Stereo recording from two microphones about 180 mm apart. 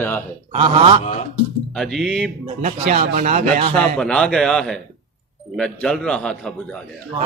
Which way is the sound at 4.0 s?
5° left (ahead or behind).